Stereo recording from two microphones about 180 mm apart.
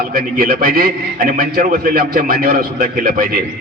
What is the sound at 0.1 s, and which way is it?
A man's voice, 55° right (ahead or behind).